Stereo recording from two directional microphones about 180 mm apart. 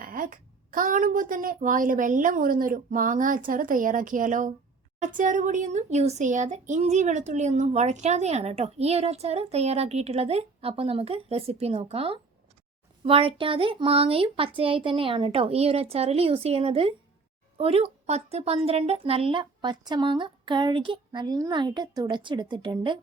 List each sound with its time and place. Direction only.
0.0 s a child's voice: 50° right (ahead or behind); by 23.0 s 25° right (ahead or behind)